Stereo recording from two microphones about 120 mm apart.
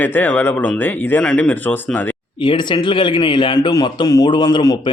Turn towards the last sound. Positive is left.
turn(degrees=40)  # may be behind; listen again after turning